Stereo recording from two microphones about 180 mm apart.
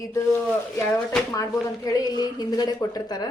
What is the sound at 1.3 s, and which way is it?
Speech, 20° left (ahead or behind).